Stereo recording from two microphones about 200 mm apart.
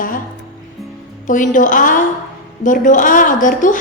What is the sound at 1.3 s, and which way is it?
A woman's voice, 40° left (ahead or behind).